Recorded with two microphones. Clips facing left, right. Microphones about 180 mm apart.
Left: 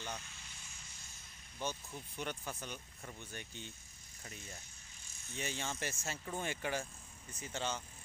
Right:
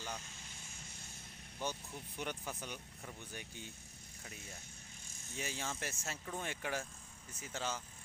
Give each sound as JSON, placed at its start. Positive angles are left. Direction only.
{"t": 0.3, "sound": "vehicle", "side_deg": -45}
{"t": 1.6, "sound": "speech", "side_deg": -15}